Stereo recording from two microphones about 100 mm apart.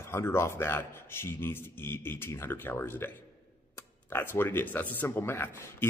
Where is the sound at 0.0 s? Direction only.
25° left (ahead or behind).